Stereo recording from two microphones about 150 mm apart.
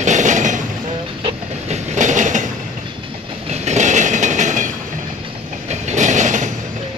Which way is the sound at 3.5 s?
50° right (ahead or behind).